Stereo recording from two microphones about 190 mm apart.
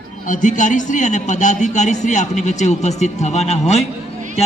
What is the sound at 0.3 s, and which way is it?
A man's voice, 40° left (ahead or behind).